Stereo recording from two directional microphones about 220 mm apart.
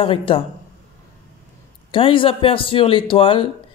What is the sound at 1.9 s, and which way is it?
Speech, 25° left (ahead or behind).